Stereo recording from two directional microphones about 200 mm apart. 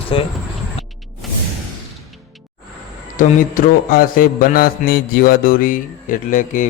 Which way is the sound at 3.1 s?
40° left (ahead or behind).